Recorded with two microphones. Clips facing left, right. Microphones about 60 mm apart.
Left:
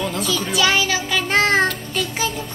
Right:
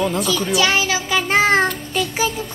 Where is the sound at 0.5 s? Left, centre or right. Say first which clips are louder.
Even; centre.